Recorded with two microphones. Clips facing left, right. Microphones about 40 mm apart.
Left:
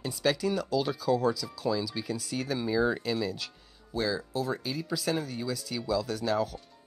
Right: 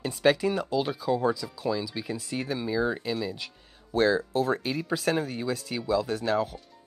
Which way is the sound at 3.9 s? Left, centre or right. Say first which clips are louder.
Right 7 dB; right.